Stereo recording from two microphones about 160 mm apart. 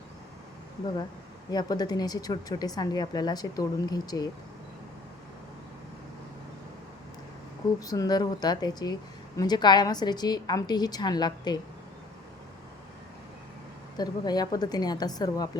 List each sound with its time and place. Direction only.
1.5 s speech: 25° left (ahead or behind)
7.8 s speech: 20° left (ahead or behind)
13.9 s speech: 25° left (ahead or behind)